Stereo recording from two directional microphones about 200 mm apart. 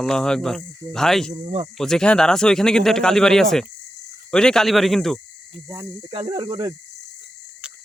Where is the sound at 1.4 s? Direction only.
30° right (ahead or behind).